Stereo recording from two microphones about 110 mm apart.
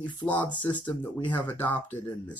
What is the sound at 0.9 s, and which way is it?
Speech, 15° left (ahead or behind).